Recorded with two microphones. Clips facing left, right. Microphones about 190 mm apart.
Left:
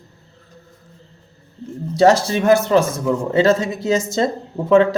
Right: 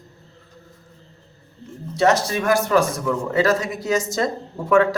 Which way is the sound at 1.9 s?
30° left (ahead or behind).